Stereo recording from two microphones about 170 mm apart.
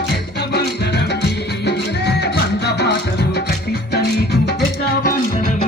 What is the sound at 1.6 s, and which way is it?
Music, 85° left.